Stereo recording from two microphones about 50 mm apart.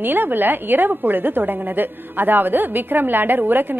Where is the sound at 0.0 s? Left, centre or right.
Right.